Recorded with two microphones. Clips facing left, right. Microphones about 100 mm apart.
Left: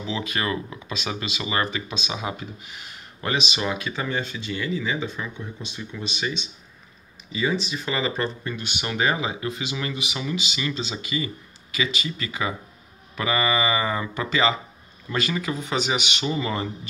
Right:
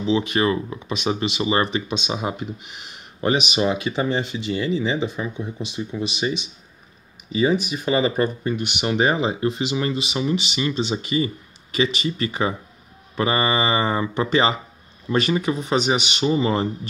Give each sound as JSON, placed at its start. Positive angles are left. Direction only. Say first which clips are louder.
{"t": 0.0, "sound": "speech", "louder": "right 8 dB", "side_deg": -25}
{"t": 7.7, "sound": "speech", "louder": "right 6 dB", "side_deg": -20}